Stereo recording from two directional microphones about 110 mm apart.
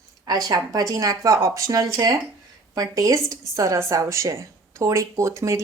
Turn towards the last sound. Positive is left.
turn(degrees=-30)  # may be behind; listen again after turning